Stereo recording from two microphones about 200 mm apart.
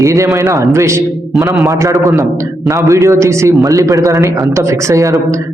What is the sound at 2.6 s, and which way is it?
A man's voice, 15° right (ahead or behind).